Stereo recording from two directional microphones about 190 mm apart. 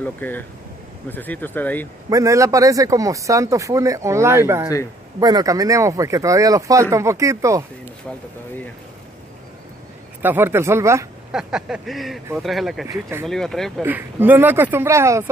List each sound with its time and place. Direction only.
0.0 s speech: 10° left (ahead or behind)
2.0 s speech: 15° right (ahead or behind)
10.2 s speech: 10° right (ahead or behind)
11.3 s a sound: 5° right (ahead or behind)
13.8 s speech: 10° right (ahead or behind)